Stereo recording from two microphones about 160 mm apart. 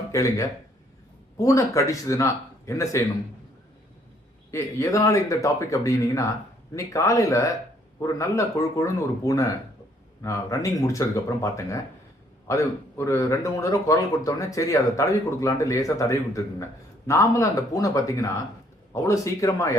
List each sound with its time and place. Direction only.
0.1 s speech: 20° left (ahead or behind)
4.5 s speech: 20° left (ahead or behind)